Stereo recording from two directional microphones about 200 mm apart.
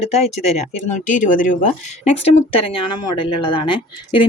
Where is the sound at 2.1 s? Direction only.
25° left (ahead or behind).